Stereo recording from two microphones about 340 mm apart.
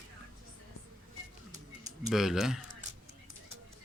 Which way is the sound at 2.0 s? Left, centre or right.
Centre.